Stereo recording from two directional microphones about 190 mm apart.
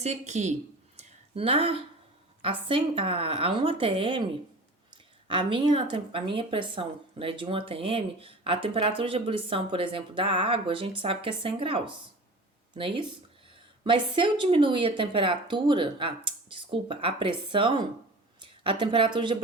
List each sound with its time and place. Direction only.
0.0 s a woman's voice: 35° right (ahead or behind)
0.9 s a sound: 35° right (ahead or behind)
2.4 s speech: 25° right (ahead or behind)
5.3 s speech: 25° right (ahead or behind)